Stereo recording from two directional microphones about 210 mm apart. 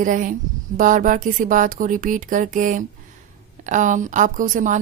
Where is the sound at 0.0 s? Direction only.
40° right (ahead or behind).